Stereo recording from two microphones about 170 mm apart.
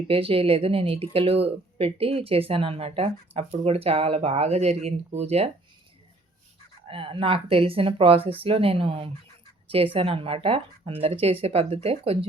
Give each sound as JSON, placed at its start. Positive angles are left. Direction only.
{"t": 0.1, "sound": "speech", "side_deg": -35}
{"t": 6.8, "sound": "speech", "side_deg": -30}